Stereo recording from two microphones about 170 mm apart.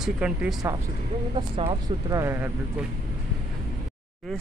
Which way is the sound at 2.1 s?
15° right (ahead or behind).